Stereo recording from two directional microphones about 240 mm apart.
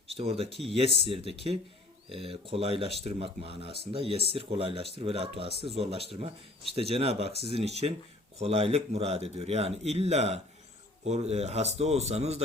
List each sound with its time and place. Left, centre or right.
0.2 s a man's voice: right
7.3 s speech: left
7.5 s a man's voice: right